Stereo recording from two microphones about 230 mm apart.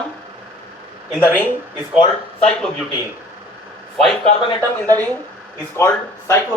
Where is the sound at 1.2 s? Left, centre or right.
Centre.